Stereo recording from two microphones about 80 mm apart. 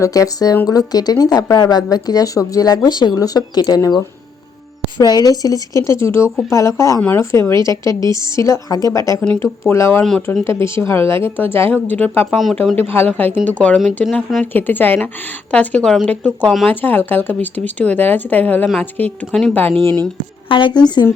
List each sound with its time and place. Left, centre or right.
0.0 s a woman's voice: left; by 13.7 s centre
13.7 s speech: centre
14.5 s a woman's voice: left
20.5 s a woman's voice: left